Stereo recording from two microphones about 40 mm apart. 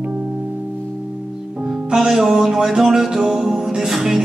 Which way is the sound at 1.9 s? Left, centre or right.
Centre.